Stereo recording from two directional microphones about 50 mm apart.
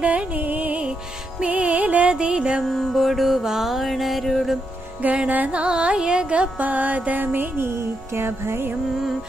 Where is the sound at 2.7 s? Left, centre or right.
Centre.